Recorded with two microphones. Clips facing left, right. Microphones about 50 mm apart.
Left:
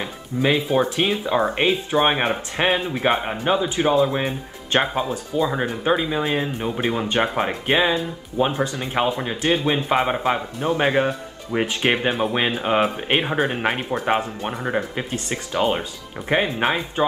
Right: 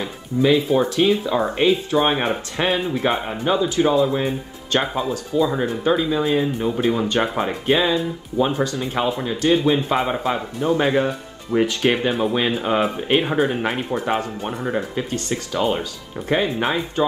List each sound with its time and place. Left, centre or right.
0.4 s speech: left
16.2 s speech: centre
16.5 s speech: left